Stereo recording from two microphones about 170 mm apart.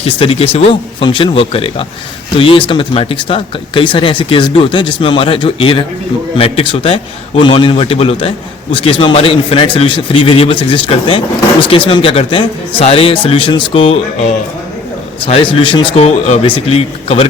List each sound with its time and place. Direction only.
0.0 s speech: 35° left (ahead or behind)
15.2 s speech: 30° left (ahead or behind)